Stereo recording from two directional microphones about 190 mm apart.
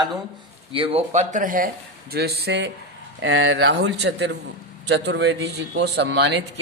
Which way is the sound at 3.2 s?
80° right.